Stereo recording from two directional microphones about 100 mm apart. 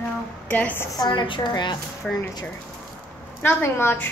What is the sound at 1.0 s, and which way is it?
Speech, 50° left (ahead or behind).